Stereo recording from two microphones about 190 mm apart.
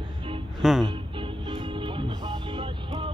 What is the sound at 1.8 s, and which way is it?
Music, 25° right (ahead or behind).